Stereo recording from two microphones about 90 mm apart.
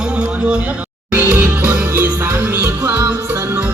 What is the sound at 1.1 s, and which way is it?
Music, 20° right (ahead or behind).